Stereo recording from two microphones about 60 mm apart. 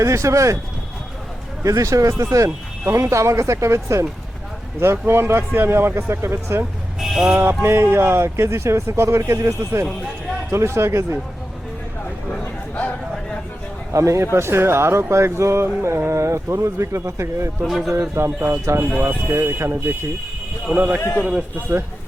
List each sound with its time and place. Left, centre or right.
0.0 s speech: right
1.6 s speech: right
7.0 s speech: centre
7.3 s speech: right
12.3 s a sound: left
13.9 s speech: right
14.3 s speech: right
17.7 s a man's voice: centre
17.9 s speech: right
19.0 s speech: right
20.7 s a man's voice: right